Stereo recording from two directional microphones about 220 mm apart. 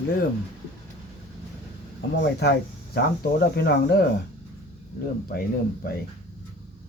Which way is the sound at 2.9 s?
45° left (ahead or behind).